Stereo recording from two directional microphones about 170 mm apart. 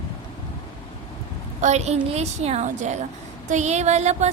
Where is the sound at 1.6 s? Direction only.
40° right (ahead or behind).